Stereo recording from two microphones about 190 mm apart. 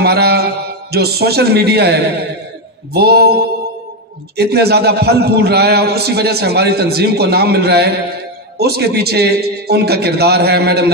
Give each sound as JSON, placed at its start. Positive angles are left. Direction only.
{"t": 0.0, "sound": "a man's voice", "side_deg": -60}
{"t": 4.4, "sound": "a man's voice", "side_deg": -60}